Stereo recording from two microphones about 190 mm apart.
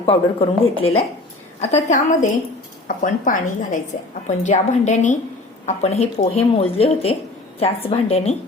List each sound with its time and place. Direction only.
0.0 s a woman's voice: 30° left (ahead or behind)